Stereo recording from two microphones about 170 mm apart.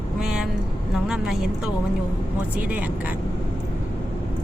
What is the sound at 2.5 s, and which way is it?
Speech, 10° right (ahead or behind).